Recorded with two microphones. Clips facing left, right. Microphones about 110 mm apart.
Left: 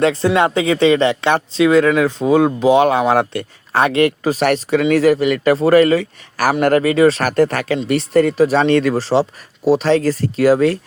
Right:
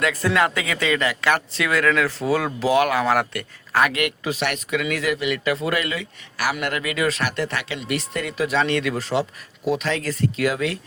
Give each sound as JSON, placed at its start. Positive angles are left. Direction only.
{"t": 0.0, "sound": "speech", "side_deg": 25}